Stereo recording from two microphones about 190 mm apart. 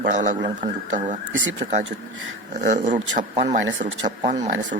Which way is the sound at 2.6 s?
40° right (ahead or behind).